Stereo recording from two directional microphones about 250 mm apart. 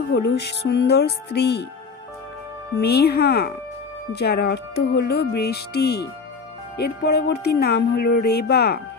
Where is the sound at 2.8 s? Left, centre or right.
Left.